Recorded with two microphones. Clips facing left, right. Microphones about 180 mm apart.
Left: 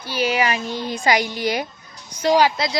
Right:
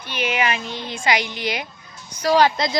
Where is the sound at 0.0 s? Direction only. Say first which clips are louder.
Left 2 dB; 35° left (ahead or behind).